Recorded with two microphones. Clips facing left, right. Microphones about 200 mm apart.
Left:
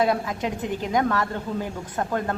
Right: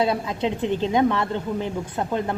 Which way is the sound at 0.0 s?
25° right (ahead or behind).